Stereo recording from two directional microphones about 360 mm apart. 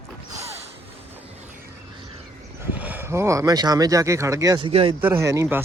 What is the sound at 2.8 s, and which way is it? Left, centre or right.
Speech, centre.